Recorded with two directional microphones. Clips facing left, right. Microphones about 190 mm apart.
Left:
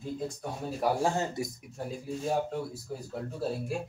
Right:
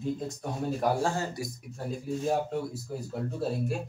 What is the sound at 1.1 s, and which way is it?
Speech, 20° left (ahead or behind).